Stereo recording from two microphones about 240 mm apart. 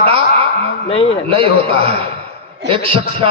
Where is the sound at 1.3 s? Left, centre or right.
Right.